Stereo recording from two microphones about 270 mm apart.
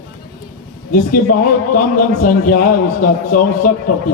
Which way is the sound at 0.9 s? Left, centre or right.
Left.